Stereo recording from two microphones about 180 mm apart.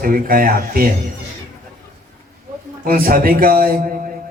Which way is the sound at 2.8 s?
55° right (ahead or behind).